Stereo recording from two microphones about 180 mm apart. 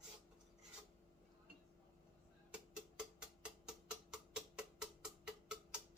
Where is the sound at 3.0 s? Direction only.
5° right (ahead or behind).